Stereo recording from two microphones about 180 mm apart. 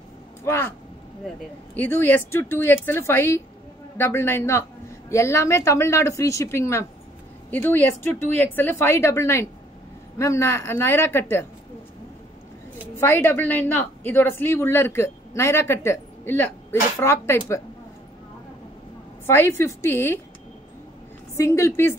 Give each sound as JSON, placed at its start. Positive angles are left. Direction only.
{"t": 0.5, "sound": "a woman's voice", "side_deg": 10}
{"t": 1.8, "sound": "a woman's voice", "side_deg": 10}
{"t": 12.9, "sound": "a woman's voice", "side_deg": 10}
{"t": 19.2, "sound": "a woman's voice", "side_deg": 15}
{"t": 21.4, "sound": "a woman's voice", "side_deg": 15}